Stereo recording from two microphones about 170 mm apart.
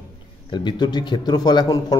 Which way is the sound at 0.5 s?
25° left (ahead or behind).